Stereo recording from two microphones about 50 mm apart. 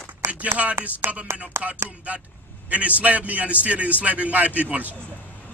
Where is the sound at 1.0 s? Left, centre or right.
Right.